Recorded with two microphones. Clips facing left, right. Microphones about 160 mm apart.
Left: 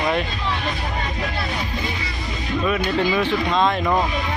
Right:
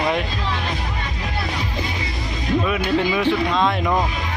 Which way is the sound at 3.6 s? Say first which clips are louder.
Even; centre (ahead or behind).